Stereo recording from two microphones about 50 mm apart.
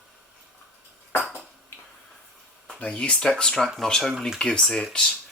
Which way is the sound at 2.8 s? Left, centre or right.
Left.